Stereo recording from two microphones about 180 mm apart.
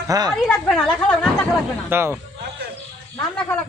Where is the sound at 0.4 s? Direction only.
5° left (ahead or behind).